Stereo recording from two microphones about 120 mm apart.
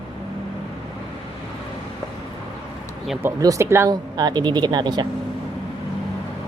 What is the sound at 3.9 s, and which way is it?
Speech, 35° right (ahead or behind).